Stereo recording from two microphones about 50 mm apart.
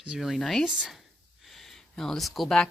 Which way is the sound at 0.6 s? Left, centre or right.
Centre.